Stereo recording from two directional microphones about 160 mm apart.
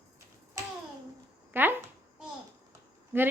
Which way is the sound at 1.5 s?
15° right (ahead or behind).